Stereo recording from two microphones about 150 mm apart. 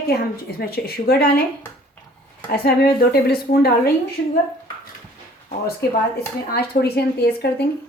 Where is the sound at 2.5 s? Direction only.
90° left.